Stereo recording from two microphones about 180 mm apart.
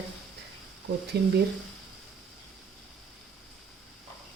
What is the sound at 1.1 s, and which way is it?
Speech, 60° right (ahead or behind).